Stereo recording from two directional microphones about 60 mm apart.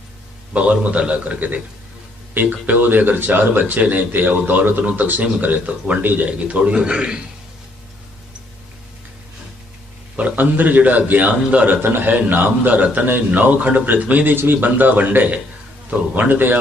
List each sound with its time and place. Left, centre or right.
0.5 s a man's voice: right
6.2 s a man's voice: centre
10.2 s a man's voice: right